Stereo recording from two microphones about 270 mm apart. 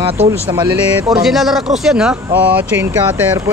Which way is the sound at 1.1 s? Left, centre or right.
Centre.